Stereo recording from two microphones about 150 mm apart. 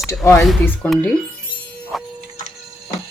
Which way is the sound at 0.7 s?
5° left (ahead or behind).